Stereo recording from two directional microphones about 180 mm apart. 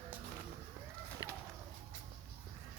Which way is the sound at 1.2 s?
20° left (ahead or behind).